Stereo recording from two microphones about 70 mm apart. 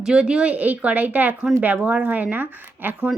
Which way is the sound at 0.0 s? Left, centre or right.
Centre.